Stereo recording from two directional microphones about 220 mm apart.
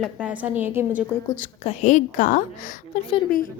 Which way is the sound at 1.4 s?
30° left (ahead or behind).